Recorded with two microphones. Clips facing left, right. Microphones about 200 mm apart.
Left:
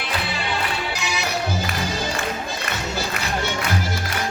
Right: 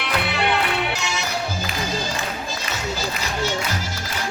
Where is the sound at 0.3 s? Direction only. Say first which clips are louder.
Right 4 dB; 65° right (ahead or behind).